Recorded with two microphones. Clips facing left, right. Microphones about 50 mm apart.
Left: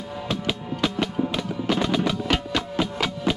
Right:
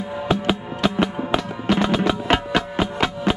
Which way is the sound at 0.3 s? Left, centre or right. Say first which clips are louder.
Right 6 dB; centre.